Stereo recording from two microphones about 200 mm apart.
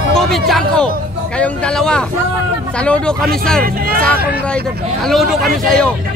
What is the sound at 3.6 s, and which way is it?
Speech, 45° right (ahead or behind).